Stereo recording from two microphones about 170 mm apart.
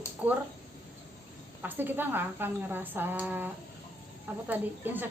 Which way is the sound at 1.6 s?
10° right (ahead or behind).